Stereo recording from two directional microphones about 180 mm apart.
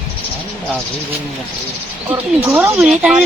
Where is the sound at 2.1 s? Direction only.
15° right (ahead or behind).